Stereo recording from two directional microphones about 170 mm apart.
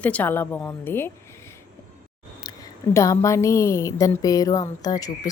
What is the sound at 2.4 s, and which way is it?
A woman's voice, 20° left (ahead or behind).